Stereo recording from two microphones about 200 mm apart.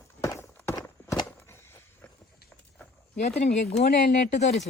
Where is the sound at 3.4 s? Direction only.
35° left (ahead or behind).